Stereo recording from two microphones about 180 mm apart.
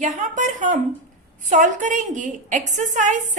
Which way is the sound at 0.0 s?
45° right (ahead or behind).